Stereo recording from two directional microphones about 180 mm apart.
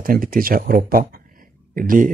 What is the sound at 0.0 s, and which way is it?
Speech, 55° right (ahead or behind).